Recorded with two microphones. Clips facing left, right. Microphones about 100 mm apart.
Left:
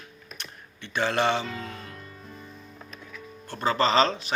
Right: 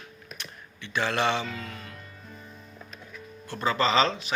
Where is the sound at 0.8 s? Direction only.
45° left (ahead or behind).